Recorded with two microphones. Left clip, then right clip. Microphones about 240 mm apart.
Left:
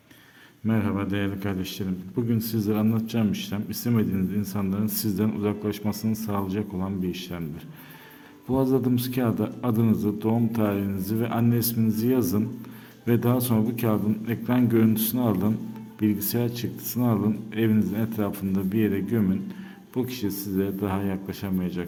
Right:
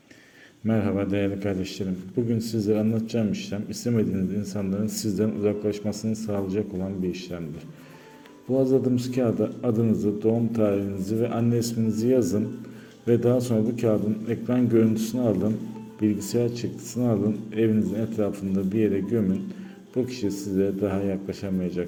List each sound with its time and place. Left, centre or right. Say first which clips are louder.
0.7 s a man's voice: right 2 dB; centre
8.6 s speech: right 1 dB; left